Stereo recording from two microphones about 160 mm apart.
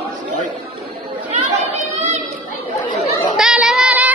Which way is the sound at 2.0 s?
45° right (ahead or behind).